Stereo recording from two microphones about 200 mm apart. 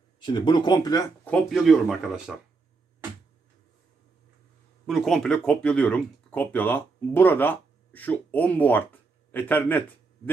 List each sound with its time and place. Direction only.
0.2 s speech: 20° left (ahead or behind)
1.2 s speech: 5° left (ahead or behind)
4.9 s speech: centre (ahead or behind)